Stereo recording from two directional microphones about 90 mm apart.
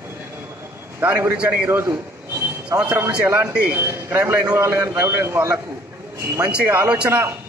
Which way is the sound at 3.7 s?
25° right (ahead or behind).